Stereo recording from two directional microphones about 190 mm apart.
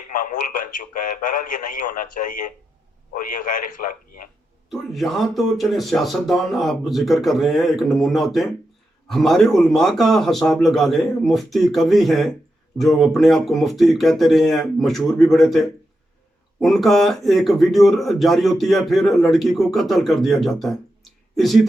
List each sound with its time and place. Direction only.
0.1 s speech: 45° left (ahead or behind)
4.7 s speech: centre (ahead or behind)